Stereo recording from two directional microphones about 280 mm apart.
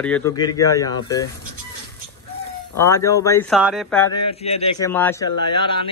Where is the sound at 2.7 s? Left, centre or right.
Centre.